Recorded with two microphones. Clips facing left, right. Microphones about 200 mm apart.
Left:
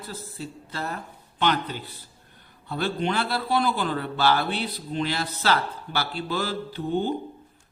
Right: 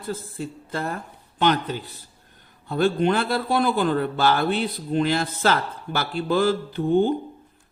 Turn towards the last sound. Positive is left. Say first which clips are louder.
# right 6 dB
turn(degrees=-50)  # may be behind; listen again after turning